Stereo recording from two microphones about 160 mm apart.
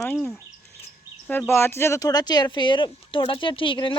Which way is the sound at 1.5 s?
15° left (ahead or behind).